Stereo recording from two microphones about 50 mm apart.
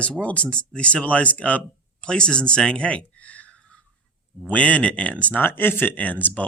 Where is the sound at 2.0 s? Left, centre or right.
Centre.